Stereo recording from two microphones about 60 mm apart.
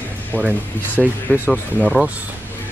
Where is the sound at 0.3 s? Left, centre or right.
Left.